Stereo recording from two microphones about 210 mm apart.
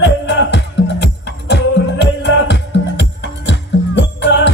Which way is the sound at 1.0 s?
55° left (ahead or behind).